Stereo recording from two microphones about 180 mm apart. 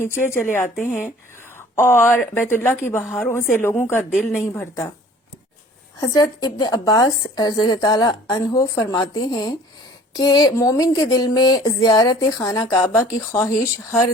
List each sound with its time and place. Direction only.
0.0 s speech: 15° left (ahead or behind)
3.0 s a woman's voice: centre (ahead or behind)
3.6 s speech: 10° left (ahead or behind)
4.1 s a woman's voice: 5° right (ahead or behind)
4.5 s speech: 15° left (ahead or behind)
6.0 s a woman's voice: 20° left (ahead or behind)